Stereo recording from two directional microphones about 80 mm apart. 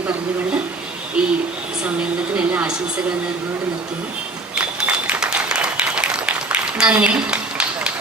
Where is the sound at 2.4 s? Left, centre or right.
Centre.